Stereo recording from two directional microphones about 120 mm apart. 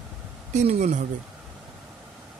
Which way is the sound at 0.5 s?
75° right (ahead or behind).